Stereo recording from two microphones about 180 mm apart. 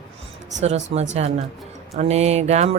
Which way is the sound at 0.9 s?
35° right (ahead or behind).